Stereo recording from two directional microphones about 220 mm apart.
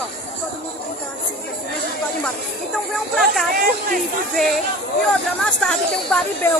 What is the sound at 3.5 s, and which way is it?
Speech, 40° right (ahead or behind).